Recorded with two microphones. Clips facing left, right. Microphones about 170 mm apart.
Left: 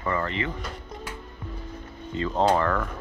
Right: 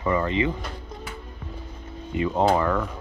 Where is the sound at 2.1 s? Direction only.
15° right (ahead or behind).